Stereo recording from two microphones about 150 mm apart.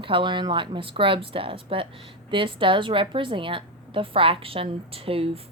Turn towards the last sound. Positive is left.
turn(degrees=-40)  # may be behind; listen again after turning